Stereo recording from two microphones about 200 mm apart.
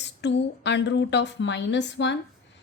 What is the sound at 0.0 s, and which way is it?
A woman's voice, 60° left (ahead or behind).